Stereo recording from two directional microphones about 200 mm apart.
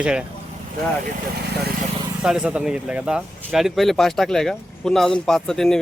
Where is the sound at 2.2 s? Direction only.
5° right (ahead or behind).